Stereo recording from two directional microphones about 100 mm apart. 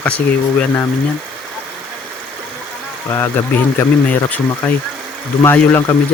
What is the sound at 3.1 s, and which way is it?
Speech, 20° left (ahead or behind).